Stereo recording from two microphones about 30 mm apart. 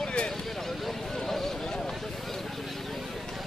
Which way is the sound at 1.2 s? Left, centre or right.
Centre.